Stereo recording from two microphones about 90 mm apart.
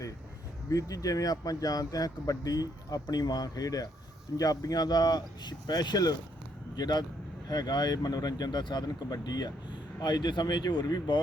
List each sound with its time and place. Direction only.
0.7 s speech: 40° left (ahead or behind)